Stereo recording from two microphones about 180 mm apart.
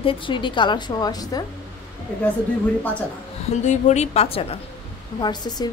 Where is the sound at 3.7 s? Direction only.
40° left (ahead or behind).